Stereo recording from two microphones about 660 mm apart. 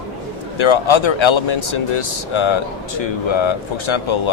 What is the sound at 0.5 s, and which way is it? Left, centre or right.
A man's voice, left.